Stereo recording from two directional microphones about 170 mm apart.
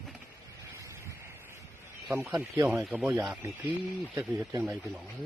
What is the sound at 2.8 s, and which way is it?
Speech, centre (ahead or behind).